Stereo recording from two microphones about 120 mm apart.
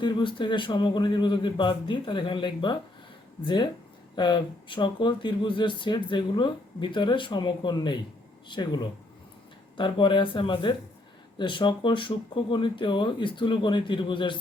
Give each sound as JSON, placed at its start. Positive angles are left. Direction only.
{"t": 0.0, "sound": "speech", "side_deg": 40}